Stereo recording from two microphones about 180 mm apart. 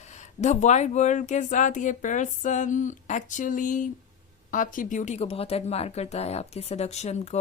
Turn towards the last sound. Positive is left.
turn(degrees=35)  # may be behind; listen again after turning